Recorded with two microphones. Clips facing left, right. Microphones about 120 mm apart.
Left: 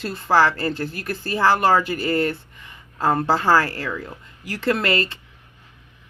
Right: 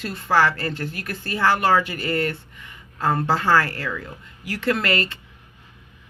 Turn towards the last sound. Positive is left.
turn(degrees=35)  # may be behind; listen again after turning